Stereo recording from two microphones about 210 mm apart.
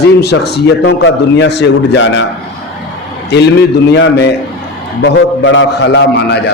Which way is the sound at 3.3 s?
55° left (ahead or behind).